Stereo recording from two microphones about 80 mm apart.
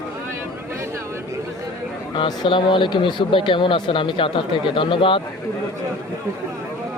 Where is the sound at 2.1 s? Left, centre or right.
Left.